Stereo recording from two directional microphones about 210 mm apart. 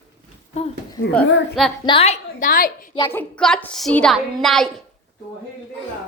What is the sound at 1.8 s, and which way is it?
Speech, 25° left (ahead or behind).